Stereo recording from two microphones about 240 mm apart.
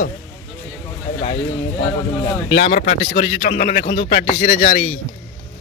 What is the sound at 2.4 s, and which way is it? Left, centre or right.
A man's voice, left.